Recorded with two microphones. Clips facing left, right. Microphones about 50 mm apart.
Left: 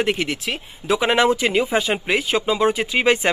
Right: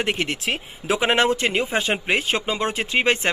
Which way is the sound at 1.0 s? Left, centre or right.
Centre.